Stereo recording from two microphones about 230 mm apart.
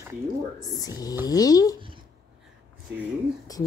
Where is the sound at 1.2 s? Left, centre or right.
Centre.